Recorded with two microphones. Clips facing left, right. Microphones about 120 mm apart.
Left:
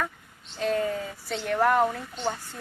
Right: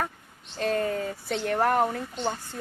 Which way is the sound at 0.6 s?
60° right (ahead or behind).